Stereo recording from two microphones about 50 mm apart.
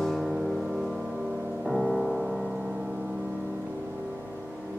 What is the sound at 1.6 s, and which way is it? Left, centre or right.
Music, centre.